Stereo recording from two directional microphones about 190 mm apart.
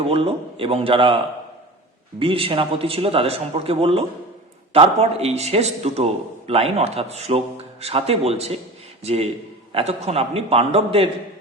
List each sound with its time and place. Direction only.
0.0 s a man's voice: 30° right (ahead or behind)